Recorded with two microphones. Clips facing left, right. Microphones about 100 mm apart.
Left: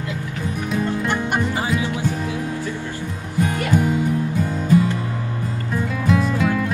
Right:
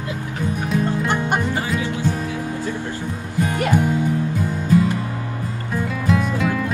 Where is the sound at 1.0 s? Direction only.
20° right (ahead or behind).